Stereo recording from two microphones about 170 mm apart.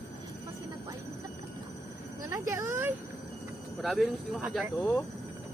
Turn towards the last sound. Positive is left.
turn(degrees=5)  # may be behind; listen again after turning